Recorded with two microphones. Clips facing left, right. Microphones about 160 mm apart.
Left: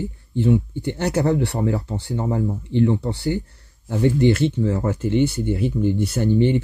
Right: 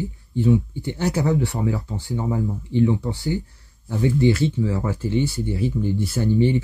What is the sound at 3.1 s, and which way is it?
Speech, 70° left (ahead or behind).